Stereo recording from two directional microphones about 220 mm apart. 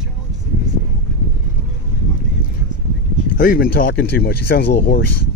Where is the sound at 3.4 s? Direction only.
40° left (ahead or behind).